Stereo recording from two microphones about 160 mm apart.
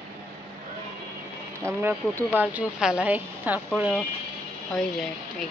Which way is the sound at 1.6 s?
15° right (ahead or behind).